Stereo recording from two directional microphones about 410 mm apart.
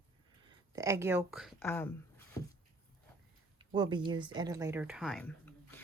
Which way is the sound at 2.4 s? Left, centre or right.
Centre.